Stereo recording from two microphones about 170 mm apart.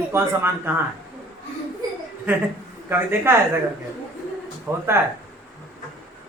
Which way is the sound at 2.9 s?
15° right (ahead or behind).